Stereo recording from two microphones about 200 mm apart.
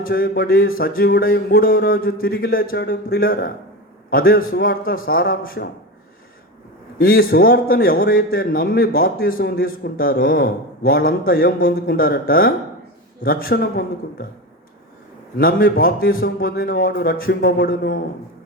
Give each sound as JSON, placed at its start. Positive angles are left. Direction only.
{"t": 0.0, "sound": "a man's voice", "side_deg": 45}
{"t": 7.0, "sound": "a man's voice", "side_deg": 45}
{"t": 15.4, "sound": "a man's voice", "side_deg": 45}